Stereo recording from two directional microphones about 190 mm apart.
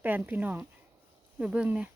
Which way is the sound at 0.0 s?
10° right (ahead or behind).